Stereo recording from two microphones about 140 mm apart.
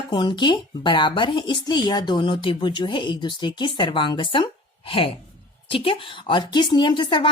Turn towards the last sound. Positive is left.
turn(degrees=35)  # may be behind; listen again after turning